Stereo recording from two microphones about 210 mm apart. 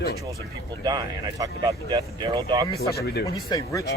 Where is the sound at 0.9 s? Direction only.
20° right (ahead or behind).